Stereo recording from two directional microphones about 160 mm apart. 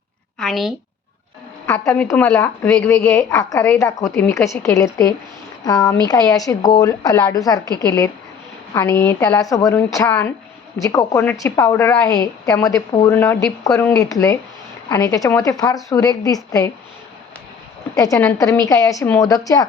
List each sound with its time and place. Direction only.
0.3 s a woman's voice: centre (ahead or behind)
1.6 s a sound: 20° left (ahead or behind)
2.1 s speech: 5° left (ahead or behind)
3.8 s speech: 20° left (ahead or behind)
10.1 s speech: 10° left (ahead or behind)
10.8 s speech: 20° left (ahead or behind)
17.9 s speech: 20° left (ahead or behind)